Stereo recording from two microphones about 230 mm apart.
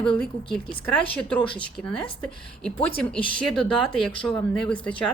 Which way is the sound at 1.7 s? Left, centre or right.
Centre.